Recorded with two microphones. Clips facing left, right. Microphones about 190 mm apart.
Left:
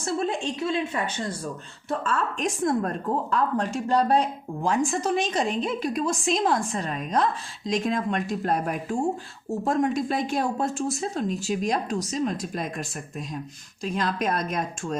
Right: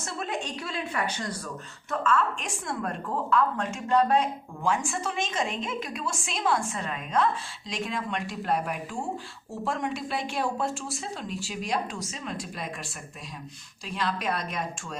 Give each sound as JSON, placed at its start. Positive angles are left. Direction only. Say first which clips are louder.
{"t": 0.0, "sound": "a woman's voice", "louder": "left 6 dB", "side_deg": 30}
{"t": 1.9, "sound": "a woman's voice", "louder": "right 1 dB", "side_deg": 35}
{"t": 13.8, "sound": "speech", "louder": "left 4 dB", "side_deg": 45}